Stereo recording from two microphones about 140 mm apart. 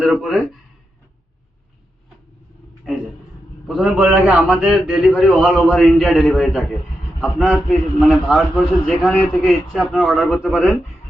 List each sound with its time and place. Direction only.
0.0 s speech: centre (ahead or behind)
3.7 s a man's voice: 10° right (ahead or behind)